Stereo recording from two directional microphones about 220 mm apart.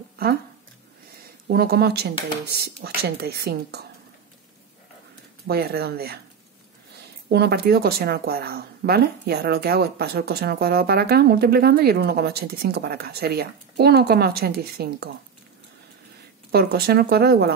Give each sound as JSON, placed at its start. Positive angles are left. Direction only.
{"t": 1.5, "sound": "speech", "side_deg": -45}
{"t": 5.5, "sound": "speech", "side_deg": -45}
{"t": 7.2, "sound": "speech", "side_deg": -50}
{"t": 16.5, "sound": "speech", "side_deg": -45}